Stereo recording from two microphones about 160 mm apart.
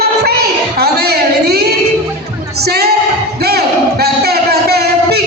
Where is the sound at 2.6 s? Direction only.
80° right.